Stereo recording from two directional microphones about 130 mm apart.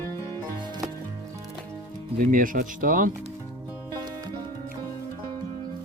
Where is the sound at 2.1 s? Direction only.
90° right.